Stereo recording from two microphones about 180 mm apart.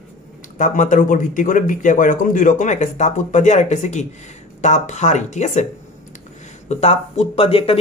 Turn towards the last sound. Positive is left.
turn(degrees=30)  # may be behind; listen again after turning